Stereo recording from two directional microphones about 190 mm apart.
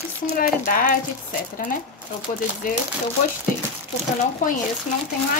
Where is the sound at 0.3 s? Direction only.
45° left (ahead or behind).